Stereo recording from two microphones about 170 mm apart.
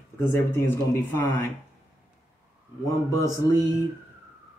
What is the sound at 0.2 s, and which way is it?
Speech, 15° left (ahead or behind).